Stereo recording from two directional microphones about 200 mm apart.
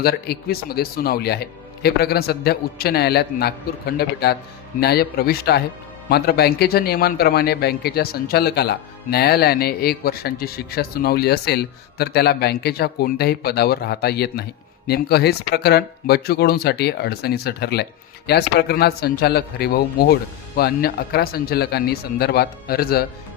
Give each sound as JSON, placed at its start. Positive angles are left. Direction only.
{"t": 0.0, "sound": "a man's voice", "side_deg": 50}